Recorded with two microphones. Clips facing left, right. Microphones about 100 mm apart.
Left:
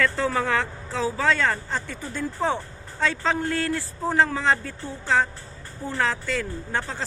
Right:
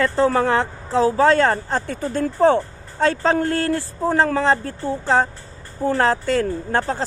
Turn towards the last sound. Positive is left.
turn(degrees=-45)  # may be behind; listen again after turning